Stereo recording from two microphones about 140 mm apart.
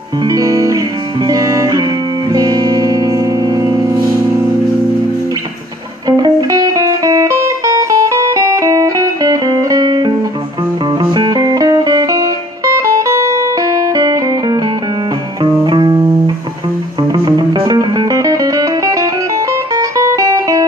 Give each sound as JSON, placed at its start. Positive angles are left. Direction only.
{"t": 0.2, "sound": "music", "side_deg": -25}
{"t": 6.0, "sound": "music", "side_deg": -30}
{"t": 15.6, "sound": "music", "side_deg": -30}
{"t": 17.1, "sound": "music", "side_deg": -30}